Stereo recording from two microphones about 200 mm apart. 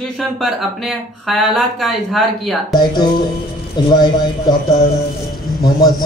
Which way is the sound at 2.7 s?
20° left (ahead or behind).